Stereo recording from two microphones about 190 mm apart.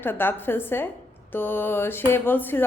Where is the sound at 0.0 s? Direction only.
10° left (ahead or behind).